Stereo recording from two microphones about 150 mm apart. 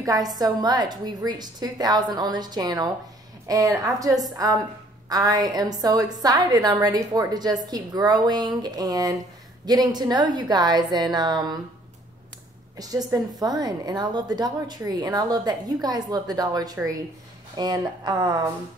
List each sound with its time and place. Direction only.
0.0 s a woman's voice: 25° right (ahead or behind)
12.7 s a woman's voice: 25° right (ahead or behind)